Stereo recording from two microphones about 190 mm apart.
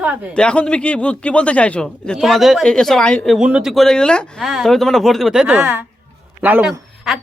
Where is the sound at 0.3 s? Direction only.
5° left (ahead or behind).